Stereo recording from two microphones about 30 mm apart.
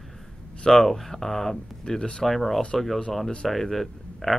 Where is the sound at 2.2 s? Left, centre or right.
Centre.